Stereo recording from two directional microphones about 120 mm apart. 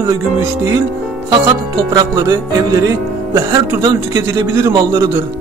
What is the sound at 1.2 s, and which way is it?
Speech, 25° right (ahead or behind).